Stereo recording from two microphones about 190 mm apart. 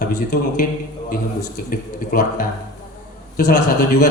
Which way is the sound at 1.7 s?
45° left (ahead or behind).